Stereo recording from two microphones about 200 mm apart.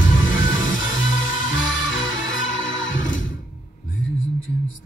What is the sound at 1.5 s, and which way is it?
Music, 70° left (ahead or behind).